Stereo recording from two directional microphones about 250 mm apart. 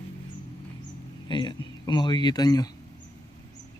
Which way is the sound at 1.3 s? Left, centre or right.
Centre.